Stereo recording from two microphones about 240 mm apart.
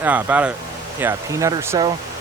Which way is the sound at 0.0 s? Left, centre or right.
Centre.